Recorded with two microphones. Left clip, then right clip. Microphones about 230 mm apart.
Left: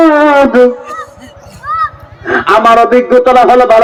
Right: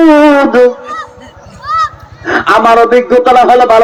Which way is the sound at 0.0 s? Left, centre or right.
Right.